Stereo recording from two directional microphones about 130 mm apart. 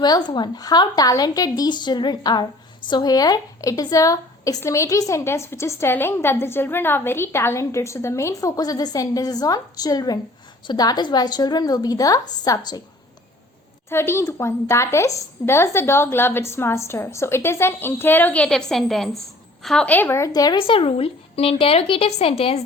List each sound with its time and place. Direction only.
0.0 s a woman's voice: 35° left (ahead or behind)
13.9 s a woman's voice: 20° left (ahead or behind)
20.6 s a woman's voice: 45° left (ahead or behind)